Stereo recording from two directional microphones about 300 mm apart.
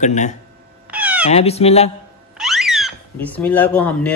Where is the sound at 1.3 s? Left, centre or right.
Left.